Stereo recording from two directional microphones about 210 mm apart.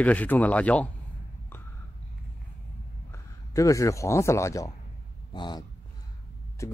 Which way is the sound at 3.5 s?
15° left (ahead or behind).